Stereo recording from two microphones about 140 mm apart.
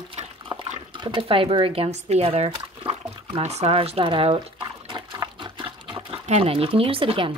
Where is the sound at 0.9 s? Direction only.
35° right (ahead or behind).